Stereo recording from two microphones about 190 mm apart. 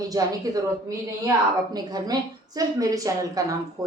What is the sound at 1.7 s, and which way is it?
A woman's voice, 20° right (ahead or behind).